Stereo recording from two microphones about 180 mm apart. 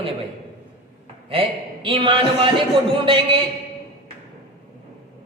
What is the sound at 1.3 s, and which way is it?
A woman's voice, 30° right (ahead or behind).